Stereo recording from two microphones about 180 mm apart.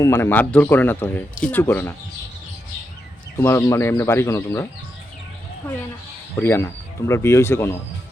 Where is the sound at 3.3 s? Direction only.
15° left (ahead or behind).